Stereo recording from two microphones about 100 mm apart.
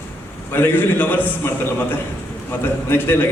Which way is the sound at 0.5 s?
20° left (ahead or behind).